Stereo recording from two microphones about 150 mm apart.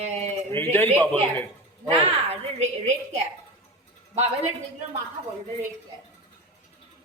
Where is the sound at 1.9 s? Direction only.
45° right (ahead or behind).